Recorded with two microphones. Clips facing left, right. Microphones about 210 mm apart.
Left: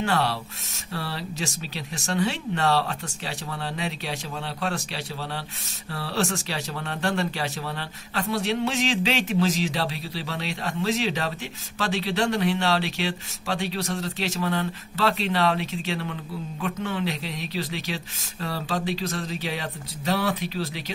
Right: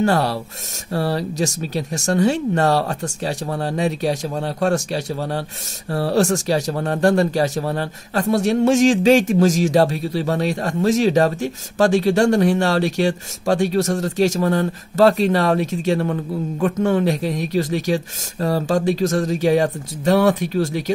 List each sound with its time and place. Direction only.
0.0 s a man's voice: 45° right (ahead or behind)